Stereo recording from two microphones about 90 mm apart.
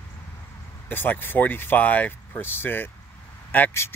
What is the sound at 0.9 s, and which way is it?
Speech, 20° left (ahead or behind).